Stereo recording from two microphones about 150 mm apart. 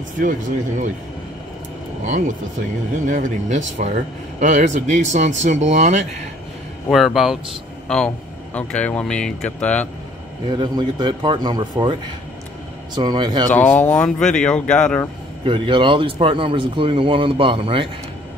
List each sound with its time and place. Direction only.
0.2 s speech: 60° right (ahead or behind)
2.0 s speech: 55° right (ahead or behind)
6.9 s speech: centre (ahead or behind)
10.5 s speech: 30° right (ahead or behind)
13.5 s speech: 10° left (ahead or behind)
15.4 s speech: 35° right (ahead or behind)